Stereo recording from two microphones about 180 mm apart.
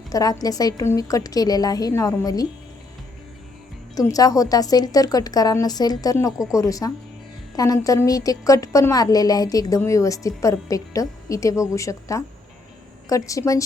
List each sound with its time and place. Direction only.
0.1 s a woman's voice: 20° left (ahead or behind)
3.9 s a woman's voice: 20° left (ahead or behind)